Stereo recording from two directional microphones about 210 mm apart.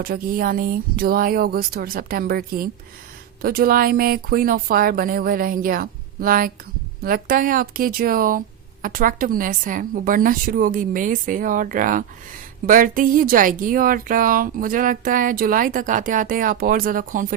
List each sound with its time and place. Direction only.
0.0 s a woman's voice: 45° right (ahead or behind)